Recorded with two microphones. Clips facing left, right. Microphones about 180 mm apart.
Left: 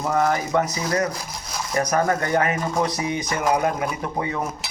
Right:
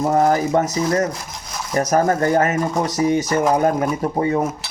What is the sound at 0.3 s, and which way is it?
Speech, 45° right (ahead or behind).